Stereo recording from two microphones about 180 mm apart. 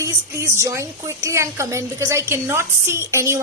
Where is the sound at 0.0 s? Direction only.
15° right (ahead or behind).